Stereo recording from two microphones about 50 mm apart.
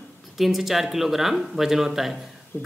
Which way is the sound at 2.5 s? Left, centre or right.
Left.